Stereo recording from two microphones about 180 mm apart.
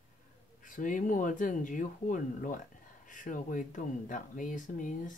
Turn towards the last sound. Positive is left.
turn(degrees=45)  # may be behind; listen again after turning